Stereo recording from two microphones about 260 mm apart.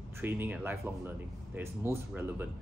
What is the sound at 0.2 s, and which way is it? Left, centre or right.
Speech, centre.